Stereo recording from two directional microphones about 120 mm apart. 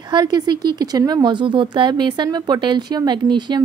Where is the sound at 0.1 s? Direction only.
35° right (ahead or behind).